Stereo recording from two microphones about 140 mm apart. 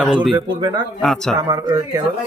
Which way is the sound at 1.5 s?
25° right (ahead or behind).